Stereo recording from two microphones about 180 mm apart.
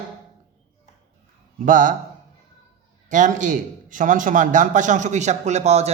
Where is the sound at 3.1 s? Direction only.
45° right (ahead or behind).